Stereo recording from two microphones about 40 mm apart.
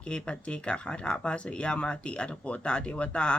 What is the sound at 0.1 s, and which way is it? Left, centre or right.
Speech, left.